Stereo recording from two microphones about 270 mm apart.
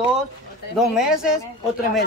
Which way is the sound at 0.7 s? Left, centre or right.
Centre.